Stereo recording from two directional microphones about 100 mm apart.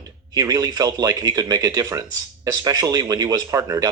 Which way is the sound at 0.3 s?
35° right (ahead or behind).